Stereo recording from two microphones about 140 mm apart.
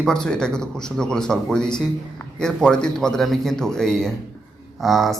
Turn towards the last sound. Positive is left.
turn(degrees=0)  # may be behind; listen again after turning